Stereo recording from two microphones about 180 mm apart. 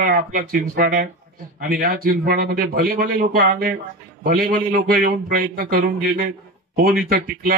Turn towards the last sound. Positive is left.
turn(degrees=-55)  # may be behind; listen again after turning